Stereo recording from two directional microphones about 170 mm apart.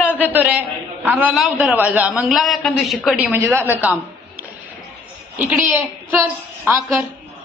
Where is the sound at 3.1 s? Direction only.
15° right (ahead or behind).